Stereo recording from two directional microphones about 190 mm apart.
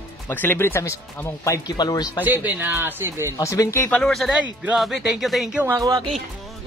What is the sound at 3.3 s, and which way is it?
Speech, 15° left (ahead or behind).